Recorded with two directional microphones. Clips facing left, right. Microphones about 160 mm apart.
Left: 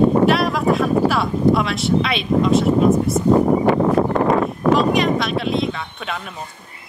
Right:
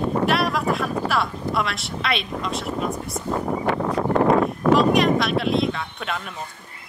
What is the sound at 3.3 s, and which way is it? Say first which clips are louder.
Speech: left 10 dB; 30° left (ahead or behind).